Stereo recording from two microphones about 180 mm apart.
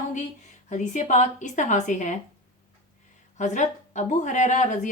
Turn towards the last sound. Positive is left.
turn(degrees=40)  # may be behind; listen again after turning